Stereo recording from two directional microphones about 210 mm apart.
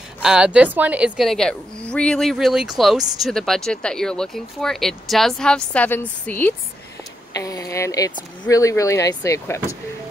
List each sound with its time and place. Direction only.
0.2 s speech: 5° right (ahead or behind); by 9.8 s 15° left (ahead or behind)